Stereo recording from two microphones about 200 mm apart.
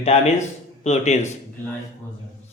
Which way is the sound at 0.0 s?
30° left (ahead or behind).